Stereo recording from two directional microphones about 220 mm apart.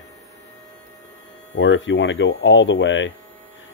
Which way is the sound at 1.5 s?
55° left (ahead or behind).